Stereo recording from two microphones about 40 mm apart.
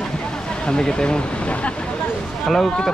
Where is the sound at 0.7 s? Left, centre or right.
Centre.